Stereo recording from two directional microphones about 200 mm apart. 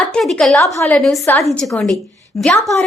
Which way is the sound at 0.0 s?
5° left (ahead or behind).